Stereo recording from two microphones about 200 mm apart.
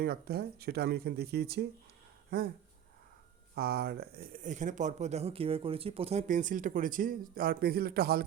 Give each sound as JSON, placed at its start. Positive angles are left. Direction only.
{"t": 0.0, "sound": "speech", "side_deg": -50}
{"t": 3.5, "sound": "speech", "side_deg": -50}